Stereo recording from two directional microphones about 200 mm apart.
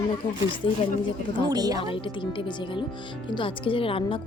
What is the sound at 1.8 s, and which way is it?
Speech, 25° left (ahead or behind).